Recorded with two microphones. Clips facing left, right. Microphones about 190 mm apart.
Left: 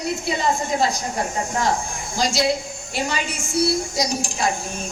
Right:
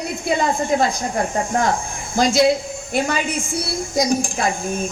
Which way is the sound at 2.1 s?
55° right (ahead or behind).